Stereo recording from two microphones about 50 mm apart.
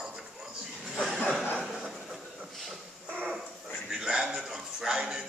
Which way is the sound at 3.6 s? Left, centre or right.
Centre.